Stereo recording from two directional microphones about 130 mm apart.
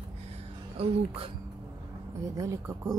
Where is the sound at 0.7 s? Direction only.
50° right (ahead or behind).